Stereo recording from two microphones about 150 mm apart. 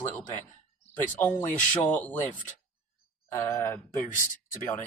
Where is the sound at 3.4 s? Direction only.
20° left (ahead or behind).